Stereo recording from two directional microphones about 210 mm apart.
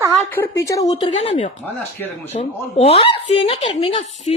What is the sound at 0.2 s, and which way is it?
A woman's voice, 10° left (ahead or behind).